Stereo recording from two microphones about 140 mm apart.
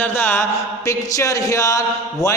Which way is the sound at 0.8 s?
25° left (ahead or behind).